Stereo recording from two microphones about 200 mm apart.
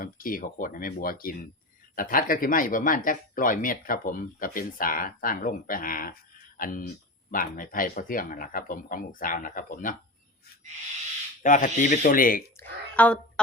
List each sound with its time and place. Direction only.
0.0 s speech: 45° left (ahead or behind)
11.4 s speech: 40° left (ahead or behind)
12.5 s a sound: 5° left (ahead or behind)